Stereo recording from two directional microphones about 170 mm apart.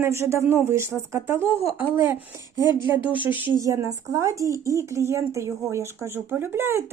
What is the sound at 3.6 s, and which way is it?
A woman's voice, 20° right (ahead or behind).